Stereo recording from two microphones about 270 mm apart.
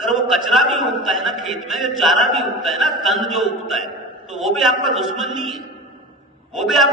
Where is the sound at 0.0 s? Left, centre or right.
Centre.